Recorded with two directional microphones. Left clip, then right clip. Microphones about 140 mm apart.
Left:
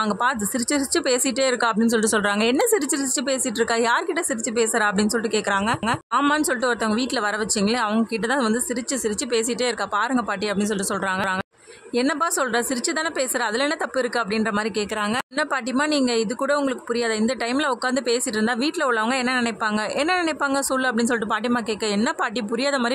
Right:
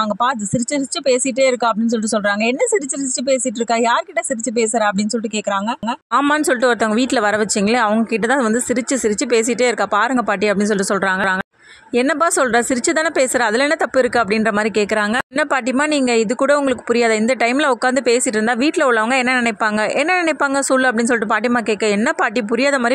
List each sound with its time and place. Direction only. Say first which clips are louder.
0.7 s speech: right 5 dB; 30° right (ahead or behind)
6.3 s speech: right 6 dB; 25° right (ahead or behind)